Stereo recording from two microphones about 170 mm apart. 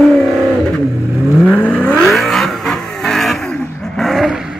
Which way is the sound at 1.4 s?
5° left (ahead or behind).